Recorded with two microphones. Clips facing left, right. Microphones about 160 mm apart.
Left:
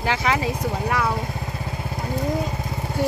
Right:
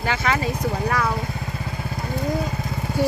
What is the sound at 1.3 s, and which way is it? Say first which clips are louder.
Motorcycle: even; 20° left (ahead or behind).